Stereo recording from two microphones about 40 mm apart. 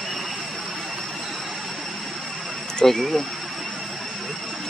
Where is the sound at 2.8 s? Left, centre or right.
Centre.